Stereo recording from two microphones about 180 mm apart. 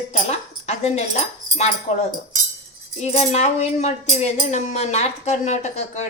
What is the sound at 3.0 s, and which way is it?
Speech, 40° left (ahead or behind).